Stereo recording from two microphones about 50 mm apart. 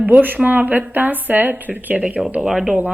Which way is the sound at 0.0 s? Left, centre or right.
Right.